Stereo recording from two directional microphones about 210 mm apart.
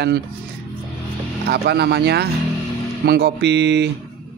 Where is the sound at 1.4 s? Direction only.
50° right (ahead or behind).